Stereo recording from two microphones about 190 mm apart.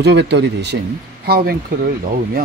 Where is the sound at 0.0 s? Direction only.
65° right (ahead or behind).